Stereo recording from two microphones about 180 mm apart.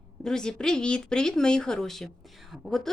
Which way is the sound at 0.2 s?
5° left (ahead or behind).